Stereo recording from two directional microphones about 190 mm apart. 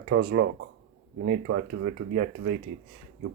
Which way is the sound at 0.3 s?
65° right (ahead or behind).